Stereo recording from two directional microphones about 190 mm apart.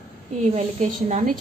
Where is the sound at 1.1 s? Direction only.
40° right (ahead or behind).